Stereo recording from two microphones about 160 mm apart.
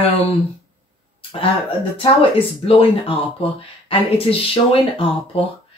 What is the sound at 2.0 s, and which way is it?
Speech, 35° left (ahead or behind).